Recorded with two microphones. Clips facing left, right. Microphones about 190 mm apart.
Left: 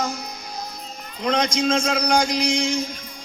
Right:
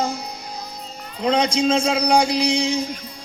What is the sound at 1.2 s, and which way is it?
Speech, 35° right (ahead or behind).